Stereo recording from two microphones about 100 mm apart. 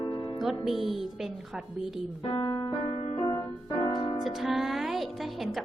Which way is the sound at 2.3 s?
45° left (ahead or behind).